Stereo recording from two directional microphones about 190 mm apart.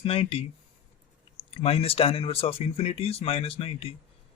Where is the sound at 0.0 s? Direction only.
30° left (ahead or behind).